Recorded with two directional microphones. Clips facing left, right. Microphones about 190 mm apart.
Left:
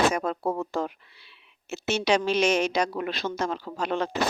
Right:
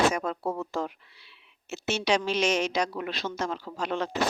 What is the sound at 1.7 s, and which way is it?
Speech, 55° left (ahead or behind).